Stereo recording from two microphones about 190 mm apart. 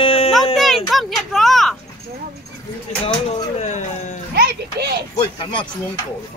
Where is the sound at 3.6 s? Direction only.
40° left (ahead or behind).